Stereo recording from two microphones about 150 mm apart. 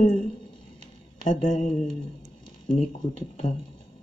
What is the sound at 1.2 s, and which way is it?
Speech, 55° left (ahead or behind).